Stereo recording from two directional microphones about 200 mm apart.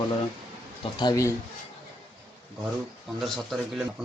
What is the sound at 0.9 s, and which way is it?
Speech, 20° left (ahead or behind).